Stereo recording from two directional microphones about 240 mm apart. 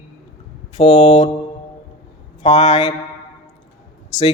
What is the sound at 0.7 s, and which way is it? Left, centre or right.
Speech, left.